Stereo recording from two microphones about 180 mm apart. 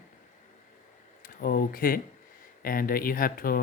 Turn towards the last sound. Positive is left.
turn(degrees=55)  # may be behind; listen again after turning